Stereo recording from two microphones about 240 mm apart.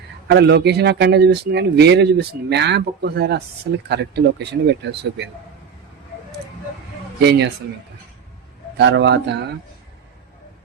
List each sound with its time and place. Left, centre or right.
0.3 s a man's voice: right
7.2 s a man's voice: right
8.8 s a man's voice: right